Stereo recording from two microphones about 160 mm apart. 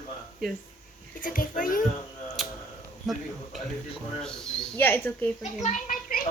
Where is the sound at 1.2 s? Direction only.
60° left (ahead or behind).